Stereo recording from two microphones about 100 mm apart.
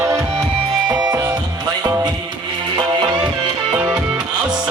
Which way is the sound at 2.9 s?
45° right (ahead or behind).